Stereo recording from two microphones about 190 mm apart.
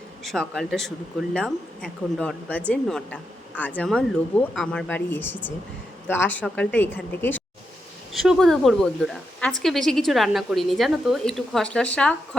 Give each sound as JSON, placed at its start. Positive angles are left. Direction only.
{"t": 0.3, "sound": "speech", "side_deg": 0}